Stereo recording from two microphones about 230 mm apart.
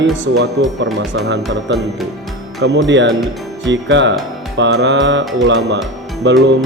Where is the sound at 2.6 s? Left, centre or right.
Right.